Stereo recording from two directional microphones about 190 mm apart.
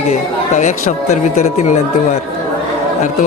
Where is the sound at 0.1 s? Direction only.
40° left (ahead or behind).